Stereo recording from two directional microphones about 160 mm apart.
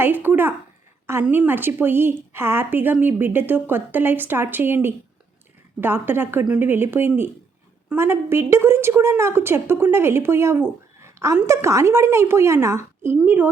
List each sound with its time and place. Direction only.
0.0 s a woman's voice: 10° right (ahead or behind)